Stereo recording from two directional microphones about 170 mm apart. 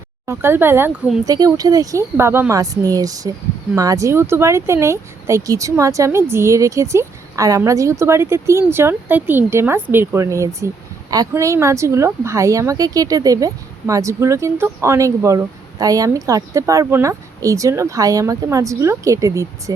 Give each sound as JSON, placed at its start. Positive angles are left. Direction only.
{"t": 0.3, "sound": "speech", "side_deg": -15}